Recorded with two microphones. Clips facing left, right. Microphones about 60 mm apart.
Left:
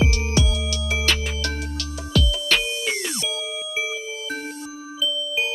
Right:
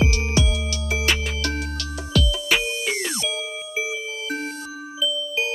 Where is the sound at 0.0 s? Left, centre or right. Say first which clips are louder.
Even; centre.